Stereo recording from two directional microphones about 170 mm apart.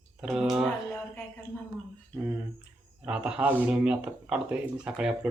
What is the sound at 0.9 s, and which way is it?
Speech, 15° left (ahead or behind).